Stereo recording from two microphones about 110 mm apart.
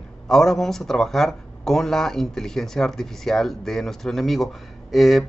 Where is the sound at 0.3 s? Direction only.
5° left (ahead or behind).